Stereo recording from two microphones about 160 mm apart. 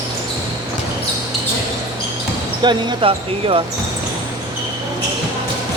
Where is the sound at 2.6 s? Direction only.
30° right (ahead or behind).